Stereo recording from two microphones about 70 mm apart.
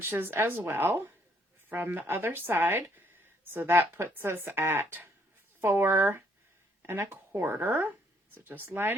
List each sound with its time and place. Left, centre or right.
0.0 s speech: right